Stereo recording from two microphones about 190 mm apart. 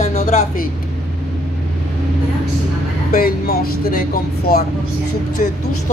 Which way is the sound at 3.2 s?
50° left (ahead or behind).